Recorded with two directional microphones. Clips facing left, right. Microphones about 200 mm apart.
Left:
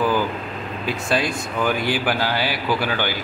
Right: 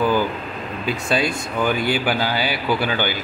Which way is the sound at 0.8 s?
Centre (ahead or behind).